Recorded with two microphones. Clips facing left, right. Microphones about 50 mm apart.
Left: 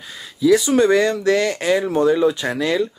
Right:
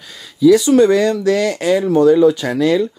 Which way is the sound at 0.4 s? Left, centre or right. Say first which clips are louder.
Right 5 dB; left.